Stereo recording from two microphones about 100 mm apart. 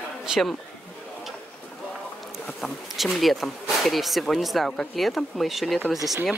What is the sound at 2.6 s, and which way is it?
Speech, centre (ahead or behind).